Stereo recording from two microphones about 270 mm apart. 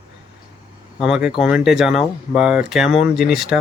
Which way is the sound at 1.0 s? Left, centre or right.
Centre.